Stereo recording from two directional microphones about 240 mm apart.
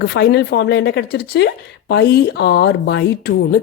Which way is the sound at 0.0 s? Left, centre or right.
Left.